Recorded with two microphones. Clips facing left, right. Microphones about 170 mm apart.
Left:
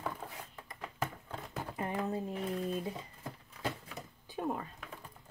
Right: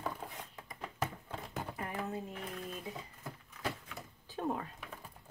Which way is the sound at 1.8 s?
30° left (ahead or behind).